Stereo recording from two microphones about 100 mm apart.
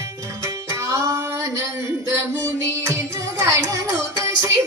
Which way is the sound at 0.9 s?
35° right (ahead or behind).